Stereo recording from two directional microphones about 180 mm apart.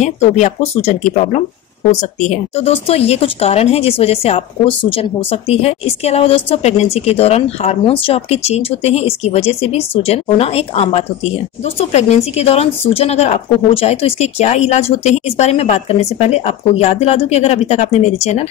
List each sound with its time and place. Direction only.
0.0 s speech: 40° left (ahead or behind)